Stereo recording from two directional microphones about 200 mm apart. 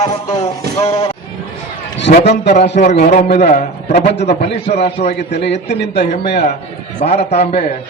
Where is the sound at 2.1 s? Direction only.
55° left (ahead or behind).